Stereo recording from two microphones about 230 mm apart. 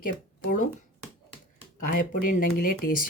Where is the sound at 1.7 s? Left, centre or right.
Left.